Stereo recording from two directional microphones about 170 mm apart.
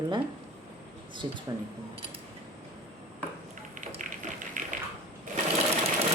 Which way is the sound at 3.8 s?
50° right (ahead or behind).